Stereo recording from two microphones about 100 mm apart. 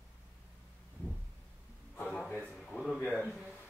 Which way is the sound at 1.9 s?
20° left (ahead or behind).